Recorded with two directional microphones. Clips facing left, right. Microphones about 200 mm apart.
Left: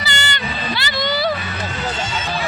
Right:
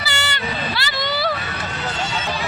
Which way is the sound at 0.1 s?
5° right (ahead or behind).